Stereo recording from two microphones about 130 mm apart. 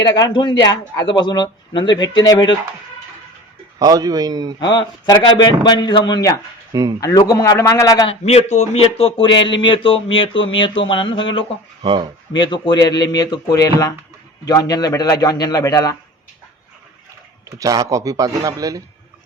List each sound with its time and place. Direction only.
0.0 s speech: 30° left (ahead or behind)
3.8 s a man's voice: 30° right (ahead or behind)
4.6 s a man's voice: 35° left (ahead or behind)
8.0 s speech: 55° left (ahead or behind)
11.8 s speech: 40° right (ahead or behind)
12.4 s a man's voice: 35° left (ahead or behind)
17.6 s a man's voice: 25° right (ahead or behind)